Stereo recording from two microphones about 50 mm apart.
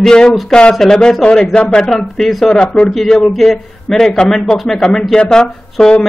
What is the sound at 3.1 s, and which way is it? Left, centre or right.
Speech, centre.